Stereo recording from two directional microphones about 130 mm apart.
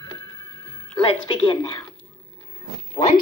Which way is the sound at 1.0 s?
40° left (ahead or behind).